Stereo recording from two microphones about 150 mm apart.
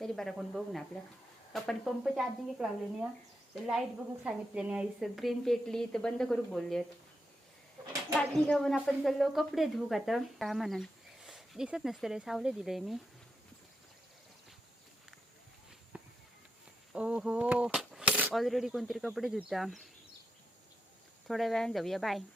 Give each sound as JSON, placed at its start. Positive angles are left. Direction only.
{"t": 0.0, "sound": "a woman's voice", "side_deg": 0}
{"t": 8.1, "sound": "a woman's voice", "side_deg": 5}
{"t": 15.9, "sound": "a sound", "side_deg": -10}
{"t": 16.9, "sound": "a woman's voice", "side_deg": -5}
{"t": 21.2, "sound": "a woman's voice", "side_deg": 0}